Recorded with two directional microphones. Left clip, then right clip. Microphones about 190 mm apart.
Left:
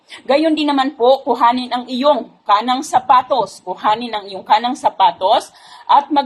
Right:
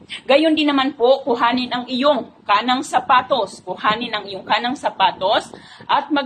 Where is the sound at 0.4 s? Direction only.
40° left (ahead or behind).